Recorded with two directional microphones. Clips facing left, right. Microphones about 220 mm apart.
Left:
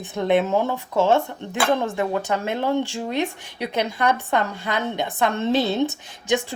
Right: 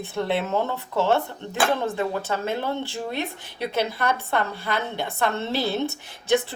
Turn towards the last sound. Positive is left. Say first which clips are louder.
# right 1 dB
turn(degrees=15)  # may be behind; listen again after turning